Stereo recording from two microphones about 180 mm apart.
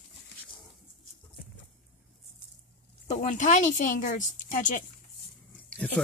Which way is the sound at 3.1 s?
40° left (ahead or behind).